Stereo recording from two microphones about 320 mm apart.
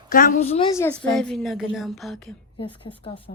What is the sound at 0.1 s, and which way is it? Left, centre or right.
Speech, left.